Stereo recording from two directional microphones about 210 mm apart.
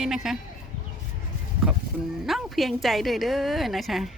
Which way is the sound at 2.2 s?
Centre (ahead or behind).